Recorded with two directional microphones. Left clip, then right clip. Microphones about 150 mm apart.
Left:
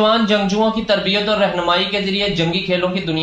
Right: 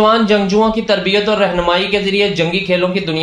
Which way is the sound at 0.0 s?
35° right (ahead or behind).